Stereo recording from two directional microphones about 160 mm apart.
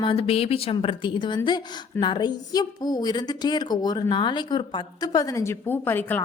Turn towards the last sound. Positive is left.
turn(degrees=10)  # may be behind; listen again after turning